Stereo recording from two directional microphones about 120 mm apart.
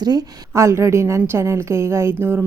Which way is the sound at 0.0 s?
35° right (ahead or behind).